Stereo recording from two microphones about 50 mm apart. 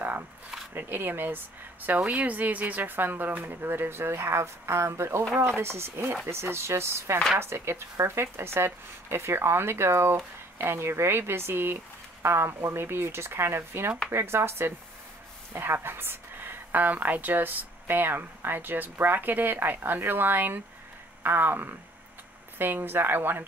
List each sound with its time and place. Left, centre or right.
0.7 s speech: right
2.0 s speech: right